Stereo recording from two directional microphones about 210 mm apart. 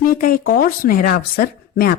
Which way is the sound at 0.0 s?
45° left (ahead or behind).